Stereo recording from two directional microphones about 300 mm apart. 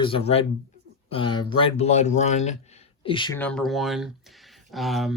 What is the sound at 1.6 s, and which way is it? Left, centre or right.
Speech, left.